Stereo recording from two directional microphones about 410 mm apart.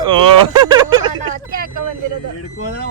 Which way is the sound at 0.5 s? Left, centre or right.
Centre.